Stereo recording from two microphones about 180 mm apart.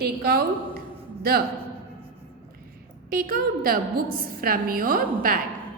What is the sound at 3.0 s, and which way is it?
A woman's voice, 55° right (ahead or behind).